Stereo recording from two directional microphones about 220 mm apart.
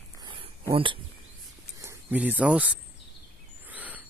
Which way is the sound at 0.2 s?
20° right (ahead or behind).